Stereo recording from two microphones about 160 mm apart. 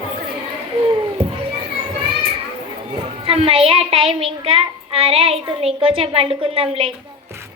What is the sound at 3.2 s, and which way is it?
A child's voice, 35° right (ahead or behind).